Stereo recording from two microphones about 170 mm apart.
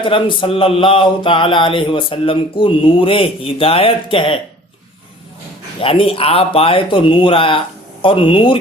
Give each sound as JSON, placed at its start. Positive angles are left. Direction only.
{"t": 0.0, "sound": "mantra", "side_deg": 30}
{"t": 5.8, "sound": "mantra", "side_deg": 35}